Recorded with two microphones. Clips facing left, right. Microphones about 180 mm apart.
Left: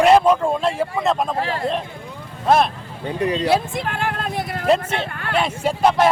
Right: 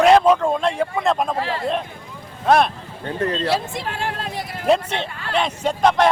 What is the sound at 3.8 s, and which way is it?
Speech, 55° left (ahead or behind).